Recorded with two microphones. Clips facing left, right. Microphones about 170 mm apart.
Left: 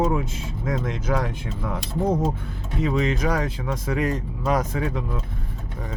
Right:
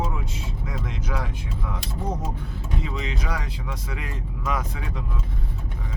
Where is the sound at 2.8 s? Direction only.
50° left (ahead or behind).